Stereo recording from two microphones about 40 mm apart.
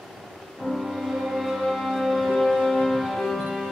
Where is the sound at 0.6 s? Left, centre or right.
Centre.